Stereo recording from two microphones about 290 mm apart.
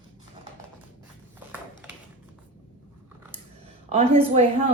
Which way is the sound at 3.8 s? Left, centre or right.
Right.